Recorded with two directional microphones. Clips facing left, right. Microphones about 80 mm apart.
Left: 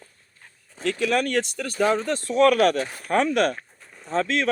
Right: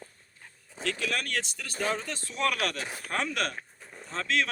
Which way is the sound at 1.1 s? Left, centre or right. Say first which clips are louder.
Left 10 dB; left.